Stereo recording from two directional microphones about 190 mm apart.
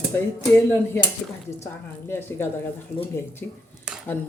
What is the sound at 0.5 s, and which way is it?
Speech, 10° left (ahead or behind).